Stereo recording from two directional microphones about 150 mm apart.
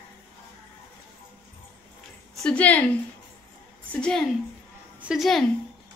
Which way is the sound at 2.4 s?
5° left (ahead or behind).